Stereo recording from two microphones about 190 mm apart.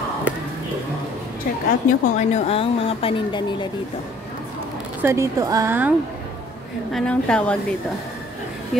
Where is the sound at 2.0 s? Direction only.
40° left (ahead or behind).